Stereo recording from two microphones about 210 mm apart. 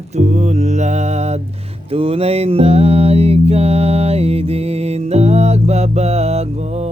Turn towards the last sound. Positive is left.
turn(degrees=-30)  # may be behind; listen again after turning